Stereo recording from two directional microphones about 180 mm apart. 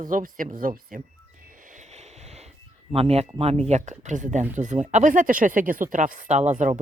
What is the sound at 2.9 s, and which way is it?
Speech, 35° right (ahead or behind).